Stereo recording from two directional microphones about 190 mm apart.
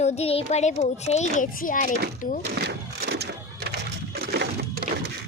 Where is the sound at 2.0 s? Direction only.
60° right (ahead or behind).